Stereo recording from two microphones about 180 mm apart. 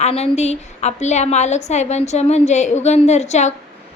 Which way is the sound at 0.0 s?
35° left (ahead or behind).